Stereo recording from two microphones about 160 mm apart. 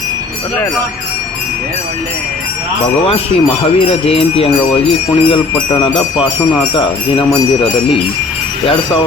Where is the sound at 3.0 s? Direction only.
35° left (ahead or behind).